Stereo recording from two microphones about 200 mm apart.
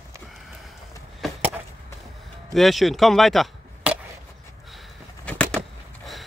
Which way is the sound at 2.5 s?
Centre (ahead or behind).